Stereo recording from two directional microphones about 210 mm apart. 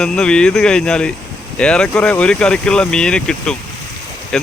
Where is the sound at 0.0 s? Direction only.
5° left (ahead or behind).